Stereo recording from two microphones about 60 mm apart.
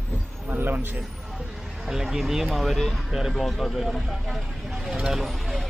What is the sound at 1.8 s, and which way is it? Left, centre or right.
Speech, centre.